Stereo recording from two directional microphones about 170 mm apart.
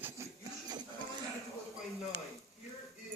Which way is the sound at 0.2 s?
15° right (ahead or behind).